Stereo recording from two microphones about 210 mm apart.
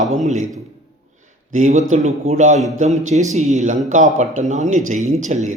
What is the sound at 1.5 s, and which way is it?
Speech, 35° right (ahead or behind).